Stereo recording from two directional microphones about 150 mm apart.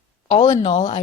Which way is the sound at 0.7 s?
50° left (ahead or behind).